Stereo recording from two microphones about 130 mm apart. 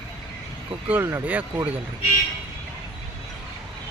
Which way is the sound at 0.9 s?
20° right (ahead or behind).